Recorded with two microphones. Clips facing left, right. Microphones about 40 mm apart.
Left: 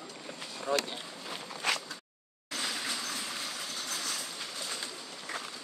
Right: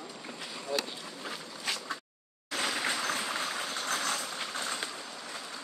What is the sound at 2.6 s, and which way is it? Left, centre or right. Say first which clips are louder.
Vehicle: right 5 dB; right.